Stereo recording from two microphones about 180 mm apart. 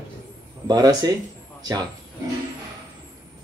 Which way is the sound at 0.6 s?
20° right (ahead or behind).